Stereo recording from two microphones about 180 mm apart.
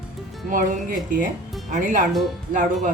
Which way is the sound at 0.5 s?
50° right (ahead or behind).